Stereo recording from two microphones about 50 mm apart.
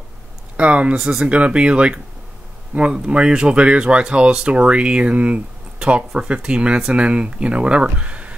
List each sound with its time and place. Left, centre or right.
0.6 s speech: right
0.9 s speech: centre
1.2 s speech: right